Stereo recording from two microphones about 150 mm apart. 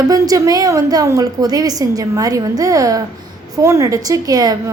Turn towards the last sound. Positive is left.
turn(degrees=-25)  # may be behind; listen again after turning